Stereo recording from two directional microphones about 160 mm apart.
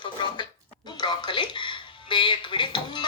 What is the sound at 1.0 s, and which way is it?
Speech, 30° left (ahead or behind).